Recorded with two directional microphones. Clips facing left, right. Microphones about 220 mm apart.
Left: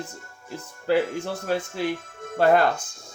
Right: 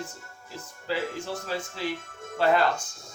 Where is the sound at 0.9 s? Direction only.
60° left (ahead or behind).